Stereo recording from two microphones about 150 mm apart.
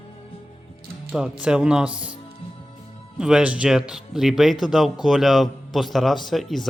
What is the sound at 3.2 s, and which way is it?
Speech, 5° right (ahead or behind).